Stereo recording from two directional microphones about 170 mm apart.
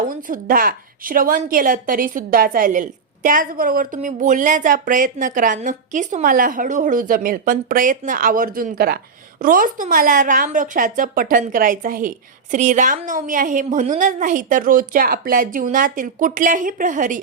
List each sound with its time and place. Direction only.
0.1 s a woman's voice: 55° right (ahead or behind)